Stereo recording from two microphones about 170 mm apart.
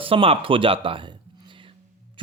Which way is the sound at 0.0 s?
30° right (ahead or behind).